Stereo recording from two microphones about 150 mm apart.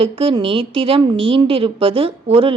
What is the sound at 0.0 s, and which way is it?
Speech, 40° right (ahead or behind).